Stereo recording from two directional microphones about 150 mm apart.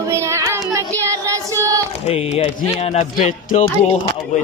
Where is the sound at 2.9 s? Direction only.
60° left (ahead or behind).